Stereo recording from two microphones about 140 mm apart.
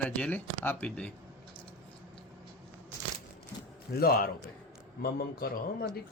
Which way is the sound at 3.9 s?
90° left.